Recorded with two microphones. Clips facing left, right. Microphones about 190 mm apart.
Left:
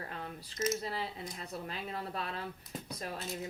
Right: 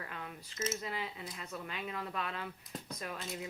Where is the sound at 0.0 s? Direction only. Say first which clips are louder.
Left 3 dB; 35° left (ahead or behind).